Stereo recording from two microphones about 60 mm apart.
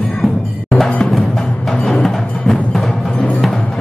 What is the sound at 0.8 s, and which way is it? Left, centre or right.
Music, left.